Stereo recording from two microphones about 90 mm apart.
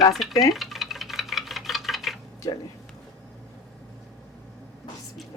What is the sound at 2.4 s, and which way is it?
Speech, 45° left (ahead or behind).